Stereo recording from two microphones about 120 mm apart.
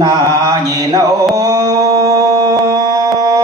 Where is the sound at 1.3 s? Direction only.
30° right (ahead or behind).